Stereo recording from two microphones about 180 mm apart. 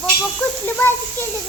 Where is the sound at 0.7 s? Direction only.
10° left (ahead or behind).